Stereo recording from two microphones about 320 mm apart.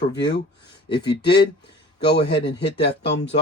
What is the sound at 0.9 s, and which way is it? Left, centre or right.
Speech, left.